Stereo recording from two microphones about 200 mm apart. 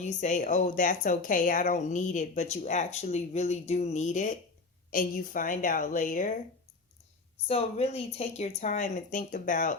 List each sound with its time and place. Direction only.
0.0 s a woman's voice: 40° left (ahead or behind)
7.4 s speech: 30° left (ahead or behind)